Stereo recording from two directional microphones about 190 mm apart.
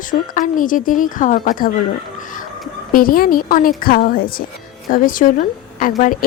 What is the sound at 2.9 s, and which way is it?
A woman's voice, 50° left (ahead or behind).